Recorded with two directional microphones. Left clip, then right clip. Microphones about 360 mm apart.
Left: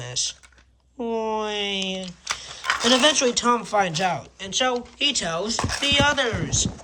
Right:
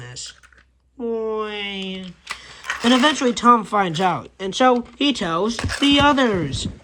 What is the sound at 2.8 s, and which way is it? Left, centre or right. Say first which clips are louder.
Speech: right 2 dB; centre.